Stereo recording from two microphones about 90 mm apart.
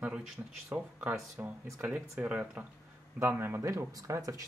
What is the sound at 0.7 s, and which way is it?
Speech, 25° right (ahead or behind).